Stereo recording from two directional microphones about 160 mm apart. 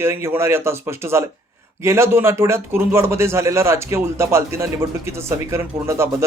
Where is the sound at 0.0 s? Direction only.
15° right (ahead or behind).